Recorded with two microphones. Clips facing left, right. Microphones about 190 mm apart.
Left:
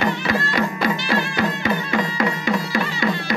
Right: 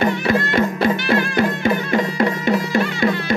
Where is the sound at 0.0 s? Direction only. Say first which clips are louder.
Right 4 dB; 55° right (ahead or behind).